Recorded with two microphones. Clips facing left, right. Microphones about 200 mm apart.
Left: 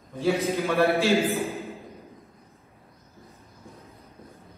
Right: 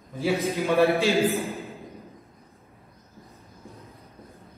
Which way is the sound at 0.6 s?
15° right (ahead or behind).